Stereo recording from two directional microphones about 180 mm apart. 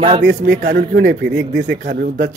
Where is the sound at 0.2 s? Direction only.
85° right.